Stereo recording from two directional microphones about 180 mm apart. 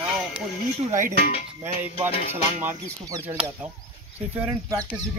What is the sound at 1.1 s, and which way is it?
Speech, 60° left (ahead or behind).